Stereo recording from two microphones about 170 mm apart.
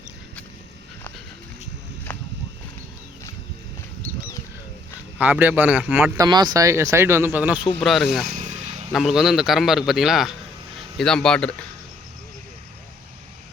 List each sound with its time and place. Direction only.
5.1 s speech: 10° right (ahead or behind)
6.2 s speech: 25° right (ahead or behind); by 8.2 s centre (ahead or behind)
8.3 s a sound: 45° right (ahead or behind)
8.9 s speech: centre (ahead or behind)